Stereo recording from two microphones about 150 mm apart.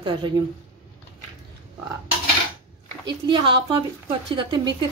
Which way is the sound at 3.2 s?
35° right (ahead or behind).